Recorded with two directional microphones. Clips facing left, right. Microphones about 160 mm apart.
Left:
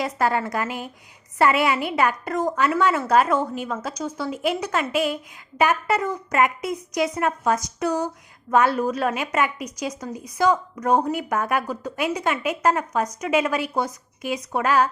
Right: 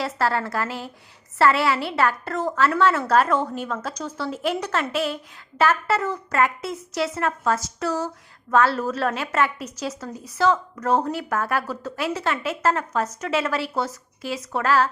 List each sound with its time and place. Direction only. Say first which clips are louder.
0.0 s a woman's voice: left 1 dB; 15° left (ahead or behind)